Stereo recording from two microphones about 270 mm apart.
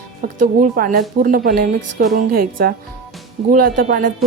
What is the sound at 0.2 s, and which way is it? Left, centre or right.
A woman's voice, right.